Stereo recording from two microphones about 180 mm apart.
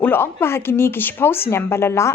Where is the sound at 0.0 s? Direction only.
10° left (ahead or behind).